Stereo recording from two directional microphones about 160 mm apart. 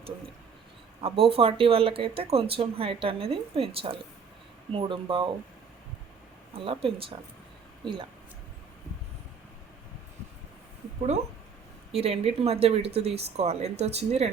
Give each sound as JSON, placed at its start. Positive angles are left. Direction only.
{"t": 1.0, "sound": "speech", "side_deg": -35}
{"t": 6.5, "sound": "speech", "side_deg": -35}
{"t": 11.9, "sound": "speech", "side_deg": -40}